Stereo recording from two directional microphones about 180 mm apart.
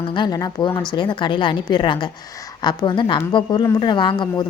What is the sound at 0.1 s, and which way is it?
A woman's voice, 25° left (ahead or behind).